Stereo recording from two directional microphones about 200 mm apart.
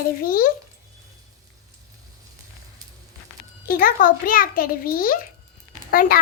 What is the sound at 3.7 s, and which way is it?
A child's voice, 45° left (ahead or behind).